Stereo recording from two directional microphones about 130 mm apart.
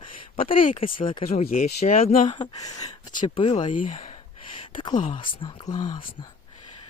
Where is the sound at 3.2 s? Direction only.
45° left (ahead or behind).